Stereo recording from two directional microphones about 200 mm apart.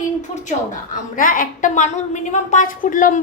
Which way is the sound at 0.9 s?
45° left (ahead or behind).